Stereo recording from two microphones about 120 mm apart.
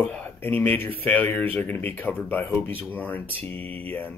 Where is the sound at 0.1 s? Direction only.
15° left (ahead or behind).